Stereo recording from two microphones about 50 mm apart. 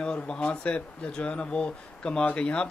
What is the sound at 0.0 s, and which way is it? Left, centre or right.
Speech, centre.